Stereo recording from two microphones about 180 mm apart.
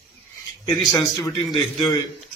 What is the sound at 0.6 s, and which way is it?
Speech, 25° left (ahead or behind).